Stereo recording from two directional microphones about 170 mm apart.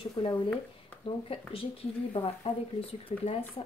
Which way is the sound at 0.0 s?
30° left (ahead or behind).